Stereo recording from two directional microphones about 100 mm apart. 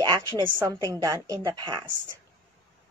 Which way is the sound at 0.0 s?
50° right (ahead or behind).